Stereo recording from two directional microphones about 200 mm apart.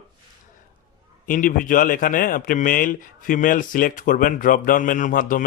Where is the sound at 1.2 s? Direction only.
40° left (ahead or behind).